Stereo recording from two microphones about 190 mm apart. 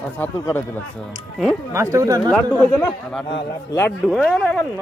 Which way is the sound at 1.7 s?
15° right (ahead or behind).